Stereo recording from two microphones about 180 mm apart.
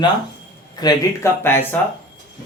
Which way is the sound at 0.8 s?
20° left (ahead or behind).